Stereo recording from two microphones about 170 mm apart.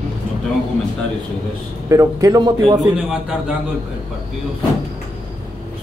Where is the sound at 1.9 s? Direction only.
20° right (ahead or behind).